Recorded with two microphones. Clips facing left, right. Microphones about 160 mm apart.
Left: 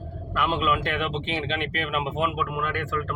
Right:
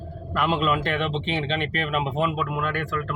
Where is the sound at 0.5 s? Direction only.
40° right (ahead or behind).